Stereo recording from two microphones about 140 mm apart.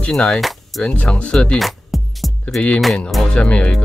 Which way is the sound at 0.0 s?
5° left (ahead or behind).